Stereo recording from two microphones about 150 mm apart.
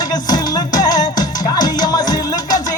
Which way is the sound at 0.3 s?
25° left (ahead or behind).